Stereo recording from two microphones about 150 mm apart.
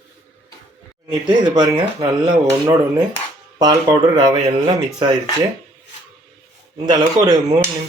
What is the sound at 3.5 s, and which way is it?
Speech, 30° right (ahead or behind).